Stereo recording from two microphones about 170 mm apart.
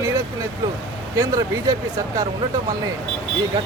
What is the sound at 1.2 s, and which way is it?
Speech, 20° right (ahead or behind).